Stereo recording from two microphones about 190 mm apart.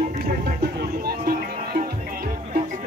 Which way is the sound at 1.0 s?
55° right (ahead or behind).